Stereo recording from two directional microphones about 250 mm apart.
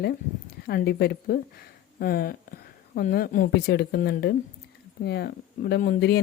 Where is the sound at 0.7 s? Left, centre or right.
Left.